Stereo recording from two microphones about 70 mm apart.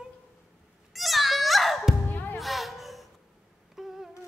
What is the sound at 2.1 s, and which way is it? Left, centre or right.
Music, left.